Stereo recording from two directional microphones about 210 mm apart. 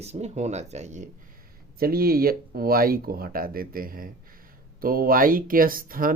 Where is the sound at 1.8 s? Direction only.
45° right (ahead or behind).